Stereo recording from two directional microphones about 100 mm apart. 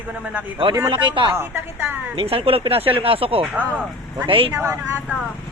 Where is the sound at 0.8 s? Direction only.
55° right (ahead or behind).